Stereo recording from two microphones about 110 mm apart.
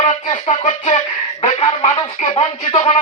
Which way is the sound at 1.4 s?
55° left (ahead or behind).